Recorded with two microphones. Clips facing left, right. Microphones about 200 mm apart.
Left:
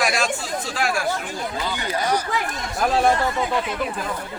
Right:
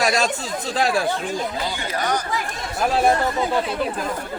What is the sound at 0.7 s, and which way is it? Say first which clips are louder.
Speech: right 5 dB; 35° right (ahead or behind).